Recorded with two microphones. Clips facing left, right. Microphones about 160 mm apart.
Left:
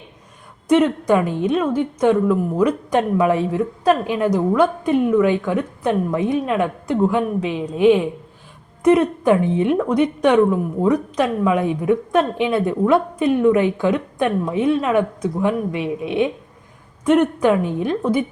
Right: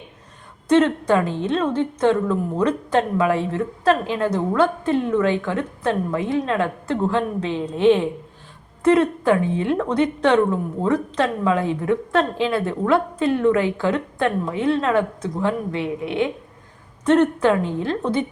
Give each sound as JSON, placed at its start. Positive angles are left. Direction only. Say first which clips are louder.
{"t": 0.7, "sound": "a woman's voice", "louder": "left 1 dB", "side_deg": 10}